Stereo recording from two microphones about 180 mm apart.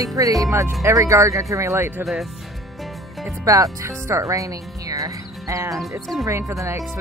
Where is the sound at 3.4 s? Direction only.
20° right (ahead or behind).